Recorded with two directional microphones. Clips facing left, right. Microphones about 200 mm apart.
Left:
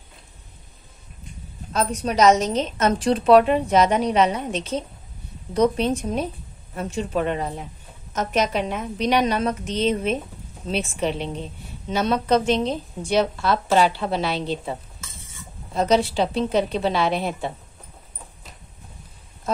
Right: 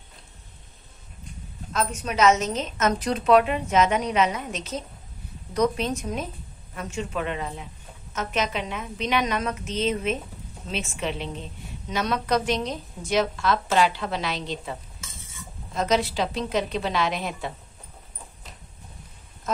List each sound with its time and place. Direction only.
1.7 s a woman's voice: 35° left (ahead or behind)